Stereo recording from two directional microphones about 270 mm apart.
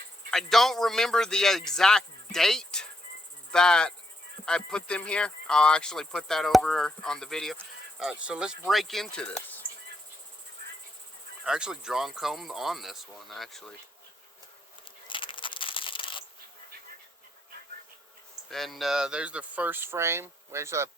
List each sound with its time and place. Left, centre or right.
0.3 s speech: centre
11.4 s speech: centre
15.0 s coin: centre
18.5 s speech: centre